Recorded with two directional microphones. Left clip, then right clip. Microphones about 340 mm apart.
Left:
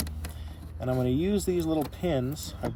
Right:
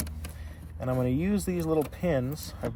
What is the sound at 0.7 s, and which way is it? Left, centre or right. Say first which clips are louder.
Speech: left 1 dB; centre.